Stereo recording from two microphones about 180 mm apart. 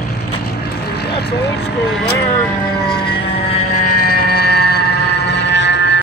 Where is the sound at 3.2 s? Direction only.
30° left (ahead or behind).